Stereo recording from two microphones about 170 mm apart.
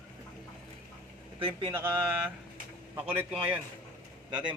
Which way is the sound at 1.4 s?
30° right (ahead or behind).